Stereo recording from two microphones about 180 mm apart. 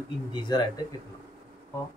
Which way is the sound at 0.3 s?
25° left (ahead or behind).